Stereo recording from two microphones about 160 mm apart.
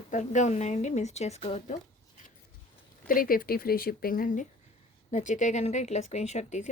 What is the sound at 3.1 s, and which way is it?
A woman's voice, 65° left (ahead or behind).